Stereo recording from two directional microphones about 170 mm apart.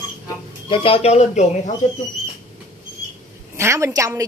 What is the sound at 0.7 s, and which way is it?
Speech, 35° left (ahead or behind).